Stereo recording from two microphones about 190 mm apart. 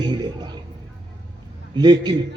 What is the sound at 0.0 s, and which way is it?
Music, 20° right (ahead or behind).